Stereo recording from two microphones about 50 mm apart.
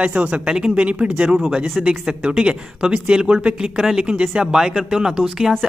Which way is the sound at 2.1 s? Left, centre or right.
Centre.